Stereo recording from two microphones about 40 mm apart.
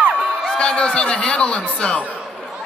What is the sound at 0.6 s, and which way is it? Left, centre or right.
Speech, left.